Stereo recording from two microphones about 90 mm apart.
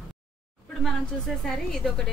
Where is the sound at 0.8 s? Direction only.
5° left (ahead or behind).